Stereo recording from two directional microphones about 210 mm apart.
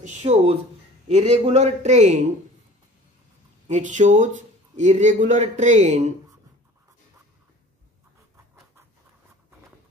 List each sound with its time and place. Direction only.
0.0 s a man's voice: 30° right (ahead or behind)
3.6 s a man's voice: 35° right (ahead or behind)